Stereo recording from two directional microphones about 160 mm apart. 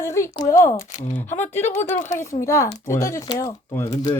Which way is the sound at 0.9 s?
50° left (ahead or behind).